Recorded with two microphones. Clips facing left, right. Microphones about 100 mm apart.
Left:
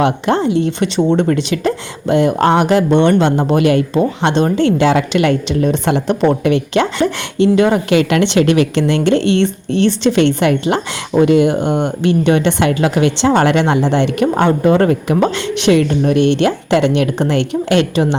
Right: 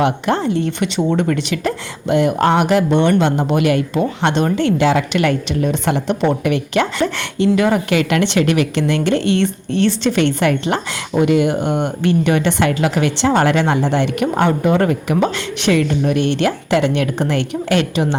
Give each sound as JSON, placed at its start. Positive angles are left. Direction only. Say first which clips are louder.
{"t": 0.0, "sound": "a woman's voice", "louder": "left 3 dB", "side_deg": 20}
{"t": 0.8, "sound": "a woman's voice", "louder": "left 4 dB", "side_deg": 30}
{"t": 15.7, "sound": "a woman's voice", "louder": "left 3 dB", "side_deg": 25}